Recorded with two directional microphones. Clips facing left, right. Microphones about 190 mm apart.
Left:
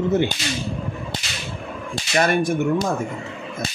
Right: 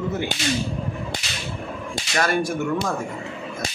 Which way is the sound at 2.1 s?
20° left (ahead or behind).